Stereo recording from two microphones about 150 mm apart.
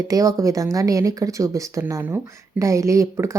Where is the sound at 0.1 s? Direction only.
20° right (ahead or behind).